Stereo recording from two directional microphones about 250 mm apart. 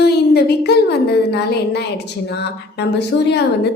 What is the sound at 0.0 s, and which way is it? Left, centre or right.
A woman's voice, left.